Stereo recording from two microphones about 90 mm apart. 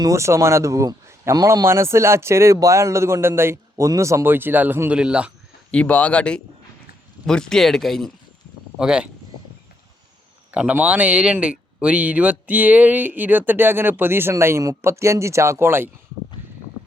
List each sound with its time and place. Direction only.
0.0 s a man's voice: 35° right (ahead or behind); by 5.3 s 10° right (ahead or behind)
5.7 s speech: 15° left (ahead or behind)
8.8 s speech: 10° right (ahead or behind)
10.5 s a man's voice: 15° right (ahead or behind)